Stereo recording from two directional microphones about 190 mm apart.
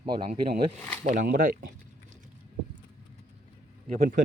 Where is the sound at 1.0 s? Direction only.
45° right (ahead or behind).